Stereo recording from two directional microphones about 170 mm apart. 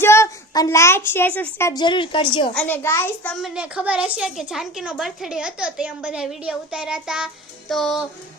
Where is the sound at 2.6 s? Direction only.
10° left (ahead or behind).